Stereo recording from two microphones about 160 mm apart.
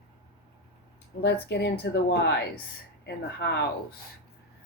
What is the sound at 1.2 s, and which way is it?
Speech, 90° left.